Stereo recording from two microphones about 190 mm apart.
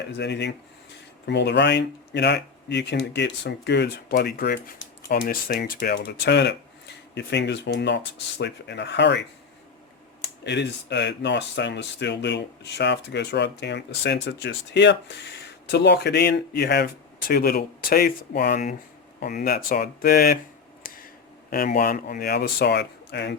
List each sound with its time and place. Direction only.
0.1 s speech: 65° left (ahead or behind)
10.4 s speech: 65° left (ahead or behind)
20.8 s a sound: 50° left (ahead or behind)
21.5 s speech: 50° left (ahead or behind)